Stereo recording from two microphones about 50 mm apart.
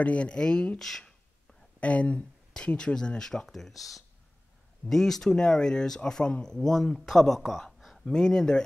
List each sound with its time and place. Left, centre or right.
0.0 s speech: left; by 1.6 s centre
1.8 s speech: left; by 7.6 s centre
8.0 s speech: centre